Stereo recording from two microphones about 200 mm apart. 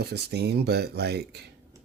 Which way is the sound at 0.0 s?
55° right (ahead or behind).